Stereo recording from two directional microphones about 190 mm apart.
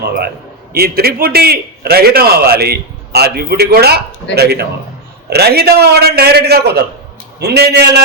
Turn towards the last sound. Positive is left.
turn(degrees=-60)  # may be behind; listen again after turning